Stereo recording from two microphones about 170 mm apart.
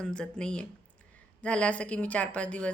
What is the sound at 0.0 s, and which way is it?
A woman's voice, 5° left (ahead or behind).